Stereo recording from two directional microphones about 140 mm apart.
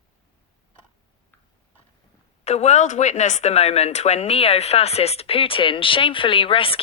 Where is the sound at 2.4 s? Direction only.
50° left (ahead or behind).